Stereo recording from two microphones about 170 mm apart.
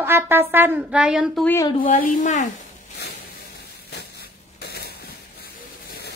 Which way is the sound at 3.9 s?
70° left (ahead or behind).